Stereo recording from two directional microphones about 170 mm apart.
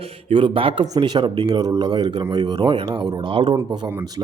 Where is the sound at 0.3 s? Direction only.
30° right (ahead or behind).